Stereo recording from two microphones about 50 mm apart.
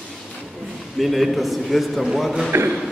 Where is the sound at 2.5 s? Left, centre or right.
Right.